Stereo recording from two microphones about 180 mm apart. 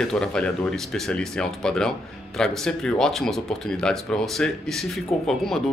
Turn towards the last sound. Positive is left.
turn(degrees=0)  # may be behind; listen again after turning